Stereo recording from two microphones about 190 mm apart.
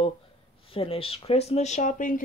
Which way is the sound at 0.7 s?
30° left (ahead or behind).